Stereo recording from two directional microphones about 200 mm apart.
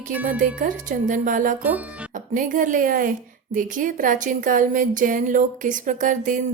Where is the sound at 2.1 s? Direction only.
40° right (ahead or behind).